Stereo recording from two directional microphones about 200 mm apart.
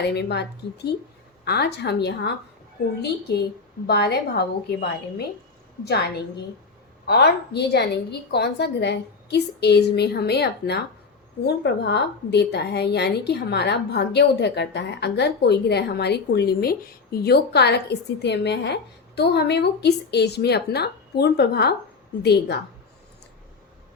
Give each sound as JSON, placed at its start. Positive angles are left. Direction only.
{"t": 0.0, "sound": "a woman's voice", "side_deg": 55}
{"t": 1.5, "sound": "a woman's voice", "side_deg": 55}